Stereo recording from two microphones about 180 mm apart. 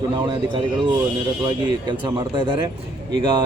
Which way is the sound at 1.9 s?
25° right (ahead or behind).